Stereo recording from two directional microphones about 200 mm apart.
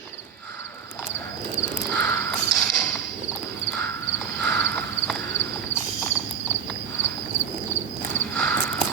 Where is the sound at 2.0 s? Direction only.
15° left (ahead or behind).